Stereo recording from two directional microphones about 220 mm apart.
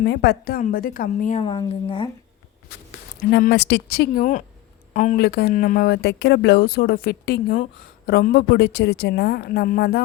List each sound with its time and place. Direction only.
0.0 s a woman's voice: 50° left (ahead or behind); by 2.0 s 25° left (ahead or behind)
3.2 s speech: 45° left (ahead or behind)